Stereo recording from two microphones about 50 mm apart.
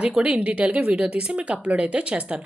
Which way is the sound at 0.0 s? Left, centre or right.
Right.